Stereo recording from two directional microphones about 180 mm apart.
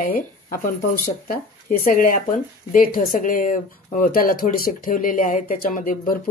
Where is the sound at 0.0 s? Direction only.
50° left (ahead or behind).